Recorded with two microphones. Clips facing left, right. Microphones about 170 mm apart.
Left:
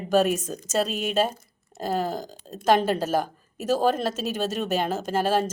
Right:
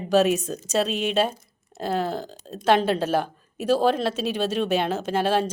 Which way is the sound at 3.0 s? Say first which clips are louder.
Right 1 dB; 40° left (ahead or behind).